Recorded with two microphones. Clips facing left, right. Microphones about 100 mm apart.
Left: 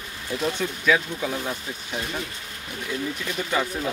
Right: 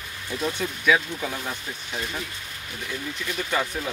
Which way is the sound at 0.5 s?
5° right (ahead or behind).